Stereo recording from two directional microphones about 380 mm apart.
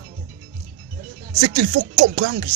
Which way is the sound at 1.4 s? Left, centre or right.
Right.